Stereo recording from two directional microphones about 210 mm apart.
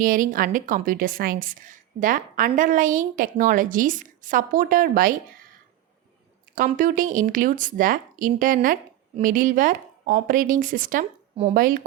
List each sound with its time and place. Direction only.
0.0 s a woman's voice: 40° right (ahead or behind)
6.6 s a woman's voice: 40° right (ahead or behind)